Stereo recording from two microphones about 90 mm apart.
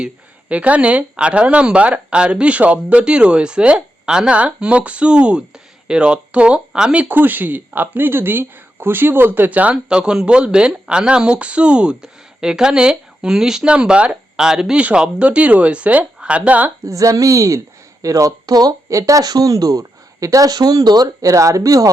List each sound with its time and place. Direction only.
0.0 s speech: 15° right (ahead or behind)
16.8 s speech: 35° right (ahead or behind)